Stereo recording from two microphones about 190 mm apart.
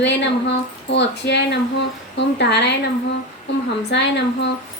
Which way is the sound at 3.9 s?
65° left (ahead or behind).